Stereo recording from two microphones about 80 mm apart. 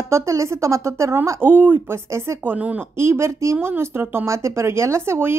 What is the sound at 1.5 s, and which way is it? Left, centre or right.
Speech, right.